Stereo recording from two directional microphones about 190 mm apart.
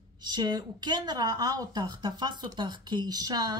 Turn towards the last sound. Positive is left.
turn(degrees=-20)  # may be behind; listen again after turning